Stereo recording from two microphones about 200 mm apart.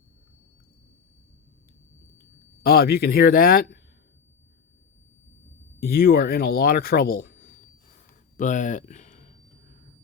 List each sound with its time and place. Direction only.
2.6 s speech: 50° left (ahead or behind)
5.9 s speech: 50° left (ahead or behind)